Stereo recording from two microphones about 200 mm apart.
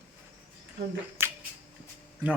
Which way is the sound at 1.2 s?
10° right (ahead or behind).